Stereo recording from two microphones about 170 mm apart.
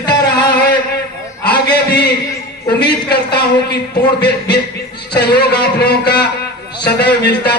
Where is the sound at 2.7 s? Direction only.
75° left (ahead or behind).